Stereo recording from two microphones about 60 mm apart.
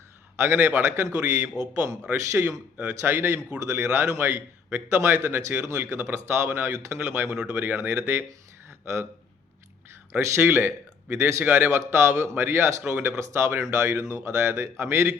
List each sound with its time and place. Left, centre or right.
0.3 s speech: right
10.1 s speech: right
11.2 s speech: right
11.4 s speech: right